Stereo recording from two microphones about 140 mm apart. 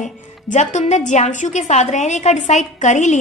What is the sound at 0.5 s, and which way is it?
A woman's voice, 60° left (ahead or behind).